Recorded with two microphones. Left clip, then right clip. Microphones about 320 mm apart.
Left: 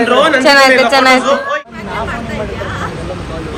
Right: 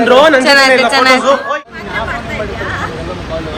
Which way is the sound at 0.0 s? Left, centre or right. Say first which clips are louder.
Right 3 dB; right.